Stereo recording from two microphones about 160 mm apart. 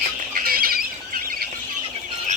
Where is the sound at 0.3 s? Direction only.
65° right (ahead or behind).